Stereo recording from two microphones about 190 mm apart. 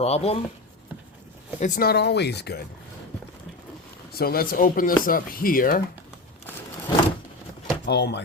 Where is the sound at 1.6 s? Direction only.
45° left (ahead or behind).